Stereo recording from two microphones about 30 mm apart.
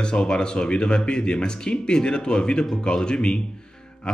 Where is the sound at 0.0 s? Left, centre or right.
Left.